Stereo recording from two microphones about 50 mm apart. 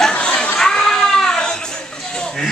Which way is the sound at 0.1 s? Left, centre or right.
Left.